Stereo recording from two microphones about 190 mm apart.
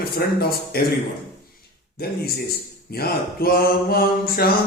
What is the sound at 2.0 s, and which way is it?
Mantra, 55° left (ahead or behind).